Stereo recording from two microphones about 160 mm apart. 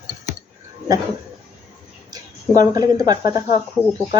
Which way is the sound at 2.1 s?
25° right (ahead or behind).